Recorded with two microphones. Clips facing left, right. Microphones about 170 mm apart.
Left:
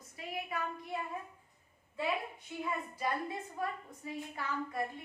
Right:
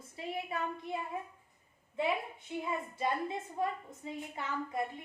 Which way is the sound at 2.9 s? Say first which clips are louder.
Right 2 dB; 25° right (ahead or behind).